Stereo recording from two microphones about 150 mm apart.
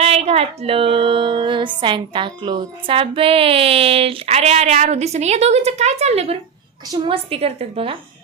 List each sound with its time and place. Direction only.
0.0 s female singing: 45° right (ahead or behind)
6.8 s a woman's voice: 30° right (ahead or behind)
7.3 s female singing: 40° right (ahead or behind)